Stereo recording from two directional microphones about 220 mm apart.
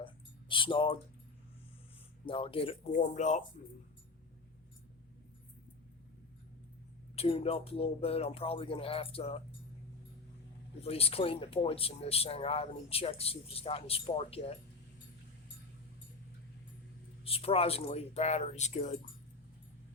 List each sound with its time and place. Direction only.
0.0 s a sound: 20° left (ahead or behind)
2.2 s speech: 25° left (ahead or behind)
7.2 s speech: 25° left (ahead or behind)
10.8 s speech: 25° left (ahead or behind)
17.2 s speech: 25° left (ahead or behind)